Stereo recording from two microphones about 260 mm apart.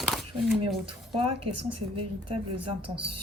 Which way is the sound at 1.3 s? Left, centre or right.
Right.